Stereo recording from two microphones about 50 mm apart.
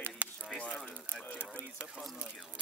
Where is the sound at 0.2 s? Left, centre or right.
Right.